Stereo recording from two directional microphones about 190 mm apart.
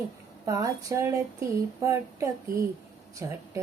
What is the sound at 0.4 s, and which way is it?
Female singing, 15° right (ahead or behind).